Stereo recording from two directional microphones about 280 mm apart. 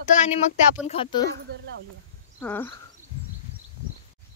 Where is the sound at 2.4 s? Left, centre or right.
Centre.